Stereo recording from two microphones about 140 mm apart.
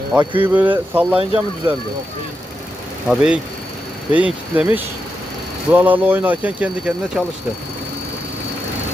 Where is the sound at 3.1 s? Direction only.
5° right (ahead or behind).